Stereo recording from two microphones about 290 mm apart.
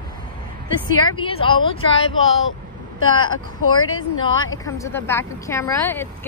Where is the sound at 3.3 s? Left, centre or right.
Left.